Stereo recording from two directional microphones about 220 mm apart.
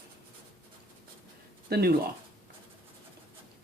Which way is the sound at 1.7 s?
45° right (ahead or behind).